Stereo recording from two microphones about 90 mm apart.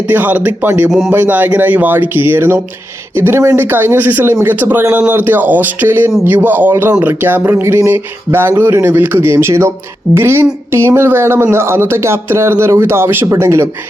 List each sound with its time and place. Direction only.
0.1 s speech: 20° right (ahead or behind)
0.9 s speech: centre (ahead or behind)
1.1 s speech: 20° right (ahead or behind)